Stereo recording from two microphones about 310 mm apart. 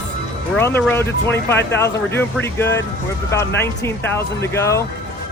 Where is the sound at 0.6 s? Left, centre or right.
Centre.